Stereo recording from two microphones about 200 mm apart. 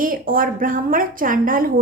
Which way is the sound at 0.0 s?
45° right (ahead or behind).